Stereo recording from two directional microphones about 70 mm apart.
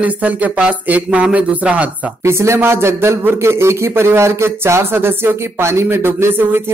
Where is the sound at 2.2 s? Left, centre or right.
Right.